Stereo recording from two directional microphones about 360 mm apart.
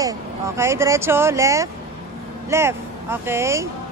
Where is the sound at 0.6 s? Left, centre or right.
Centre.